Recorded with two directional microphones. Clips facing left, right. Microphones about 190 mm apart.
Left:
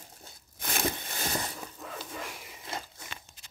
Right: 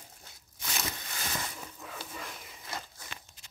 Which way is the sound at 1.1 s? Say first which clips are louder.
Left 4 dB; 35° left (ahead or behind).